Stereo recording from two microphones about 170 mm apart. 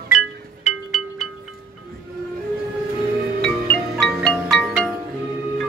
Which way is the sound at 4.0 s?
5° left (ahead or behind).